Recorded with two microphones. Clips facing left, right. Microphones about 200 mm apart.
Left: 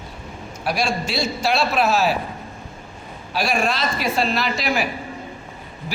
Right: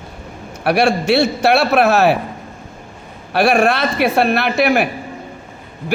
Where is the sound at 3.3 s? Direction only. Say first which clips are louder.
Right 8 dB; 65° right (ahead or behind).